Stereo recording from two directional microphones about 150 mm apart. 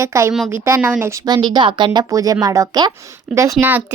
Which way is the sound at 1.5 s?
30° right (ahead or behind).